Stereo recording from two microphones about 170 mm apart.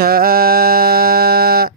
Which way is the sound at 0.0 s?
60° right (ahead or behind).